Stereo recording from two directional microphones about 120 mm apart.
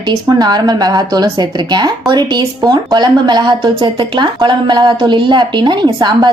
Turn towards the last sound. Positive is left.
turn(degrees=-40)  # may be behind; listen again after turning